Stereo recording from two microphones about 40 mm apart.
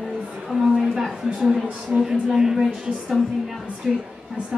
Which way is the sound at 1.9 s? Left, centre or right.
Right.